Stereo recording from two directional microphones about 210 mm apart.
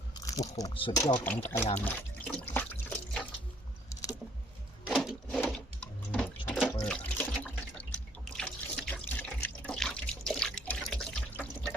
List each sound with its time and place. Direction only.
0.3 s speech: 15° left (ahead or behind)
1.8 s liquid: 10° left (ahead or behind)
4.9 s a sound: centre (ahead or behind)
5.4 s sewing machine: 5° left (ahead or behind)
6.8 s water: 5° left (ahead or behind)